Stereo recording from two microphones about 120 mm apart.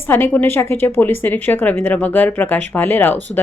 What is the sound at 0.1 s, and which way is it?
A woman's voice, 20° left (ahead or behind).